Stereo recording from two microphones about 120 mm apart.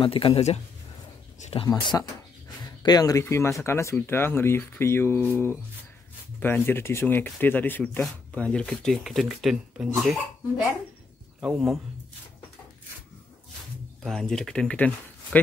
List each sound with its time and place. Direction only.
0.0 s speech: 50° left (ahead or behind)
1.8 s speech: 40° left (ahead or behind); by 10.2 s centre (ahead or behind)
11.4 s speech: centre (ahead or behind)
14.0 s speech: 5° left (ahead or behind)